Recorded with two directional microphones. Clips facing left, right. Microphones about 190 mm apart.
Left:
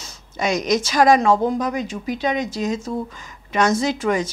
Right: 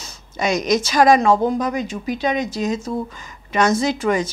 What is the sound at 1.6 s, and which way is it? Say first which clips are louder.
Speech: right 1 dB; 10° right (ahead or behind).